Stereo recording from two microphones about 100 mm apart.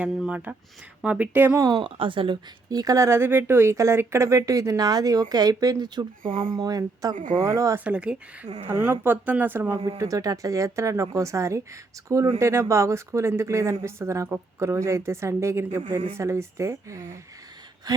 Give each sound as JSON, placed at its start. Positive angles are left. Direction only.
{"t": 0.1, "sound": "speech", "side_deg": -5}
{"t": 1.7, "sound": "speech", "side_deg": -60}
{"t": 2.6, "sound": "speech", "side_deg": -40}
{"t": 7.9, "sound": "speech", "side_deg": -10}
{"t": 10.0, "sound": "speech", "side_deg": -35}